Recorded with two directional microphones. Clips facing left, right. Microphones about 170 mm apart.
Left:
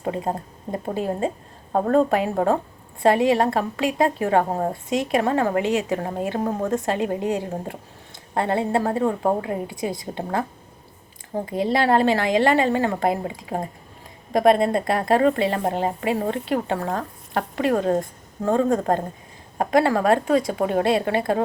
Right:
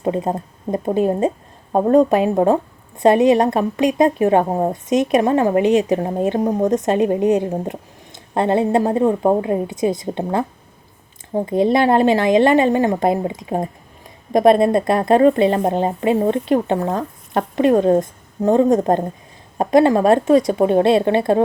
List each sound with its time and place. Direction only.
0.0 s speech: 20° right (ahead or behind)
11.4 s a woman's voice: 20° right (ahead or behind)